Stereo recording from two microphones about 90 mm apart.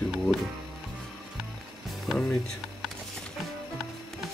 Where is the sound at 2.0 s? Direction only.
5° left (ahead or behind).